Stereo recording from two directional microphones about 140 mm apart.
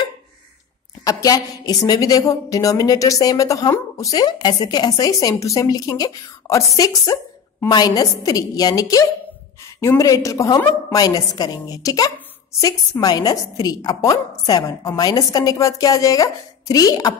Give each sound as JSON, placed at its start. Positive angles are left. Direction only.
{"t": 1.0, "sound": "a woman's voice", "side_deg": 25}